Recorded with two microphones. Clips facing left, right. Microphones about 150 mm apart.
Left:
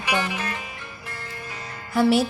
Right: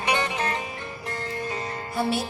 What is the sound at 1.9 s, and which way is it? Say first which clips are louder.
Speech: left 8 dB; 90° left.